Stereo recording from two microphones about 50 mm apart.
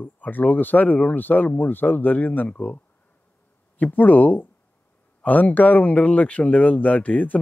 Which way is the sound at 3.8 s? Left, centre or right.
Left.